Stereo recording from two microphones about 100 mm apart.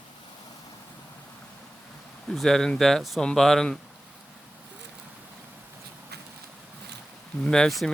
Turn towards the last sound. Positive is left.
turn(degrees=5)  # may be behind; listen again after turning